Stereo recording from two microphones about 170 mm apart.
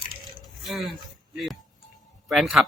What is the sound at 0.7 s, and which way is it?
Speech, centre (ahead or behind).